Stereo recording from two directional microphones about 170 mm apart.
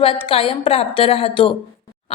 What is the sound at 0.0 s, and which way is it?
A woman's voice, 35° left (ahead or behind).